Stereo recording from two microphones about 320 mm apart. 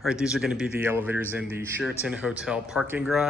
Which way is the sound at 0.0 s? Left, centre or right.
Centre.